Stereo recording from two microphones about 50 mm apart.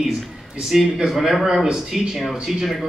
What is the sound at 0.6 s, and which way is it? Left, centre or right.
A man's voice, centre.